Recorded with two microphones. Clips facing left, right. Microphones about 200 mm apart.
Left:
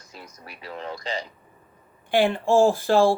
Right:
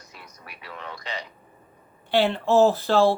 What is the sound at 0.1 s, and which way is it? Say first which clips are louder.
Speech: left 5 dB; 35° left (ahead or behind).